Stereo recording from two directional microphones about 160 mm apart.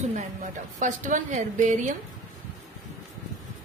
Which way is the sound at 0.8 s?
50° right (ahead or behind).